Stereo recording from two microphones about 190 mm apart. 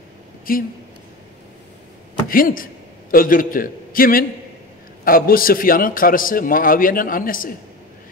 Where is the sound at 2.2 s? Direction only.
50° left (ahead or behind).